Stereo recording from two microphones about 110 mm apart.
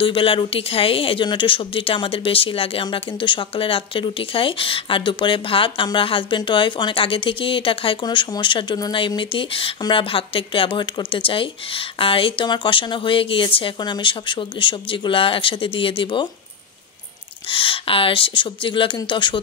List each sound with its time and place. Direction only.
0.0 s speech: 55° left (ahead or behind)
17.5 s speech: 55° left (ahead or behind)